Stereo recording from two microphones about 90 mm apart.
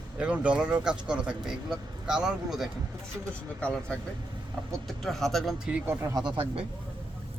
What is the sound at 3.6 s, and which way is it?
A man's voice, 10° left (ahead or behind).